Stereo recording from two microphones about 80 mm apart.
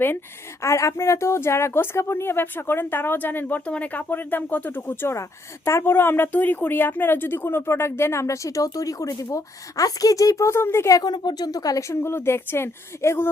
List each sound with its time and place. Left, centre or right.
0.6 s speech: left
11.0 s speech: left